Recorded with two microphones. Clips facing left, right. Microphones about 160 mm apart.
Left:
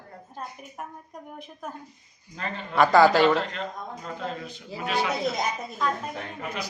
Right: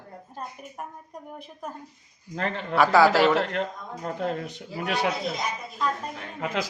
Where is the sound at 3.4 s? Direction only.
65° right (ahead or behind).